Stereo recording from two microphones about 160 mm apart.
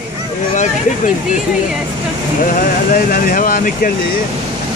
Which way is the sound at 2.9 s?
60° left (ahead or behind).